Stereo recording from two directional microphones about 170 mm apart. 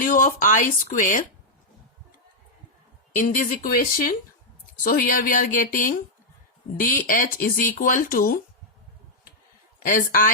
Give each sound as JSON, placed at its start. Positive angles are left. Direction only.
{"t": 0.0, "sound": "speech", "side_deg": 50}
{"t": 3.2, "sound": "speech", "side_deg": 50}
{"t": 9.8, "sound": "speech", "side_deg": 55}